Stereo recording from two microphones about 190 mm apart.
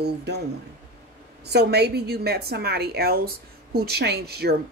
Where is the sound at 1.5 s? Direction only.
60° right (ahead or behind).